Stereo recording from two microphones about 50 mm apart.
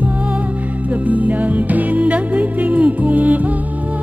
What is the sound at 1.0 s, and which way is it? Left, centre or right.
Music, right.